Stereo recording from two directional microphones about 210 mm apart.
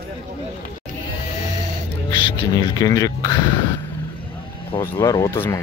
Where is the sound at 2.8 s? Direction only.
15° left (ahead or behind).